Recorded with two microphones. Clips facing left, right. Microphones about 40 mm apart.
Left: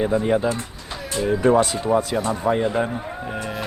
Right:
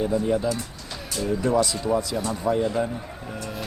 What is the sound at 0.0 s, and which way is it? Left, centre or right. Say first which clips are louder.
Speech: left 3 dB; left.